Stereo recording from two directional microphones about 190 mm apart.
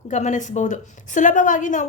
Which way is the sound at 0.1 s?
40° left (ahead or behind).